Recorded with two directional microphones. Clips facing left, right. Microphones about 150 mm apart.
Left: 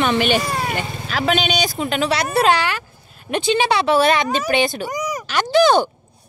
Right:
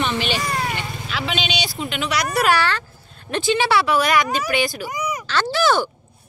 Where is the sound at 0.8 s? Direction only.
45° left (ahead or behind); by 4.9 s 25° left (ahead or behind).